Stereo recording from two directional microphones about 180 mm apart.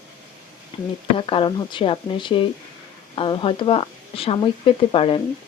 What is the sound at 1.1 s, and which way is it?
A woman's voice, 30° left (ahead or behind).